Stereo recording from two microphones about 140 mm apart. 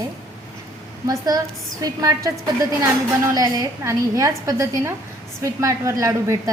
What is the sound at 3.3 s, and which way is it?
A woman's voice, 25° right (ahead or behind).